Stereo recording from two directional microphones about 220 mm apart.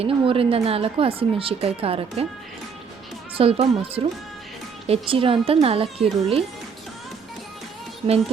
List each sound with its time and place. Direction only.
0.0 s speech: 25° right (ahead or behind)
3.3 s speech: 25° right (ahead or behind)